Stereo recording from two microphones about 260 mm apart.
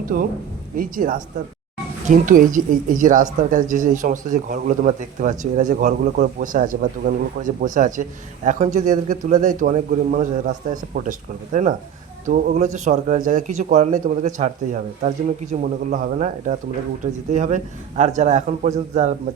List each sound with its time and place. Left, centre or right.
0.1 s speech: right